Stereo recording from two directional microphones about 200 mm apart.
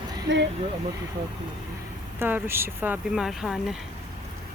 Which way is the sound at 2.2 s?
10° right (ahead or behind).